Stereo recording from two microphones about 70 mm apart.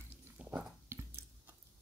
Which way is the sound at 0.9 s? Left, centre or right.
Right.